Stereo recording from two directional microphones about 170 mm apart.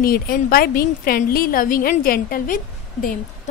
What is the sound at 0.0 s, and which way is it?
A woman's voice, 60° left (ahead or behind).